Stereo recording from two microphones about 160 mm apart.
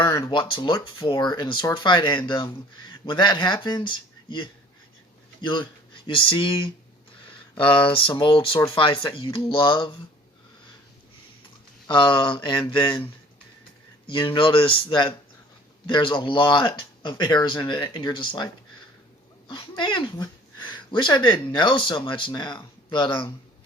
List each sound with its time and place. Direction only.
0.0 s a man's voice: 25° left (ahead or behind)
11.9 s speech: 30° left (ahead or behind)
14.1 s speech: 30° left (ahead or behind)